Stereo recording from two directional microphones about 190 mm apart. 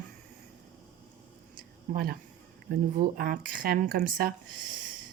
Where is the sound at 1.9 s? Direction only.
50° right (ahead or behind).